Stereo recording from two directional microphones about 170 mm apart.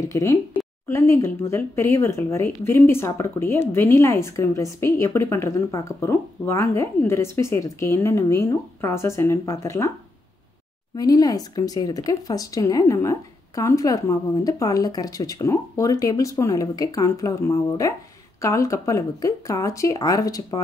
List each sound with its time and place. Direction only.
0.1 s speech: 15° left (ahead or behind)
11.0 s speech: 20° left (ahead or behind)